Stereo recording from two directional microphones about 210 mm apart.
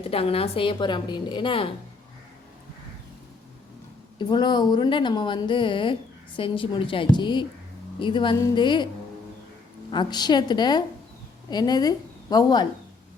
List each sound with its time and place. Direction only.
0.1 s a woman's voice: 25° left (ahead or behind)
4.2 s a woman's voice: 20° left (ahead or behind)
9.9 s a woman's voice: 20° left (ahead or behind)